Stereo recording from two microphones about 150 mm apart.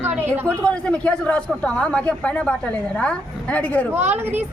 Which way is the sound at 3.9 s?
15° right (ahead or behind).